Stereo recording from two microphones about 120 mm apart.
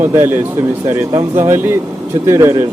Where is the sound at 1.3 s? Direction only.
20° right (ahead or behind).